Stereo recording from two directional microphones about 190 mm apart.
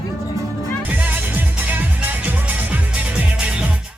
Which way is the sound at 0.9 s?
10° right (ahead or behind).